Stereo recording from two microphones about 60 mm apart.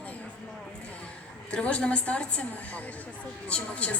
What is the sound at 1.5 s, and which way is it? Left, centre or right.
A woman's voice, left.